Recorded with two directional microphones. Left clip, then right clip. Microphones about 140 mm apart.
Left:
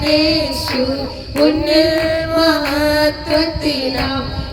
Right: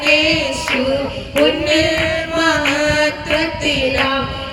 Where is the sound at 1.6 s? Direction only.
35° left (ahead or behind).